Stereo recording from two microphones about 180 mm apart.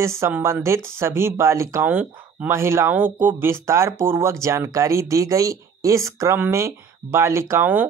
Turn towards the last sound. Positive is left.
turn(degrees=-10)  # may be behind; listen again after turning